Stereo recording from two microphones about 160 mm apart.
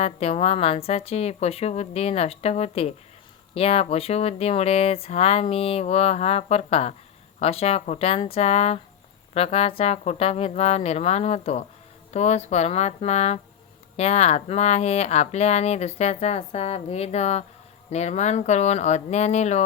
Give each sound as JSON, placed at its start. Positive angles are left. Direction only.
{"t": 0.0, "sound": "speech", "side_deg": 40}